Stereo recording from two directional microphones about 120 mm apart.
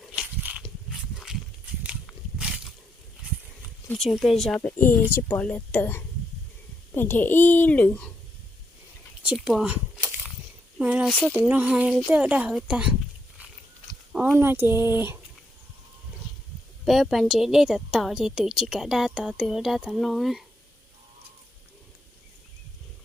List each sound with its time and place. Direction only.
0.1 s a sound: 10° right (ahead or behind)
2.4 s a sound: 5° right (ahead or behind)
3.9 s a woman's voice: centre (ahead or behind)
4.8 s a child's voice: 20° left (ahead or behind)
9.2 s speech: 10° right (ahead or behind)
10.8 s speech: 10° right (ahead or behind)
11.1 s a child's voice: 10° left (ahead or behind)
11.3 s speech: 10° right (ahead or behind)
14.1 s a sound: 5° right (ahead or behind)
14.3 s speech: 20° right (ahead or behind)
16.8 s a woman's voice: centre (ahead or behind)